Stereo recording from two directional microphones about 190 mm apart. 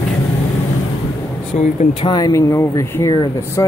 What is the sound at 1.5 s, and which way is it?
Speech, 40° left (ahead or behind).